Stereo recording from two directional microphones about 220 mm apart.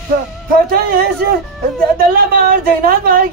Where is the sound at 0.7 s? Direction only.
40° right (ahead or behind).